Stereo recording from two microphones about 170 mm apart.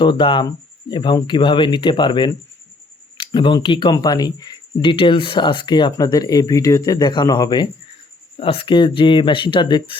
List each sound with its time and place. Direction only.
0.0 s speech: 30° left (ahead or behind)